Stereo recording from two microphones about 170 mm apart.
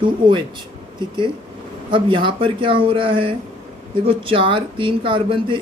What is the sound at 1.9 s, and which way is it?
Speech, 30° right (ahead or behind).